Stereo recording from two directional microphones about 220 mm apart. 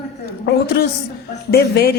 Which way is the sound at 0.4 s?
50° left (ahead or behind).